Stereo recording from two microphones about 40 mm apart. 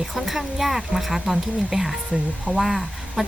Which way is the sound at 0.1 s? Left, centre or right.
Centre.